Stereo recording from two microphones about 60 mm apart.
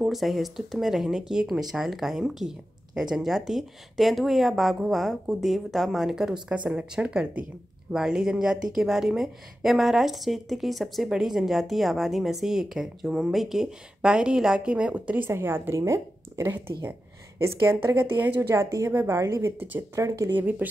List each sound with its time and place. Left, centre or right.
0.0 s speech: centre
6.5 s speech: right
7.9 s a woman's voice: centre; by 15.2 s right
15.2 s a woman's voice: right
15.8 s speech: right
16.5 s a woman's voice: right
18.4 s a woman's voice: right
20.2 s a woman's voice: right